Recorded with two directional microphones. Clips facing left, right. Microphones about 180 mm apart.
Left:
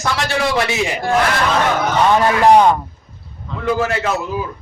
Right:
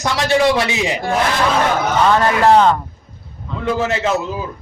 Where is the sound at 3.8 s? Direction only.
20° right (ahead or behind).